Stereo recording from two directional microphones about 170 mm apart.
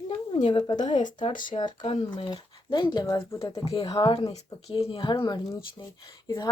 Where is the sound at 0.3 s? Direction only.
25° left (ahead or behind).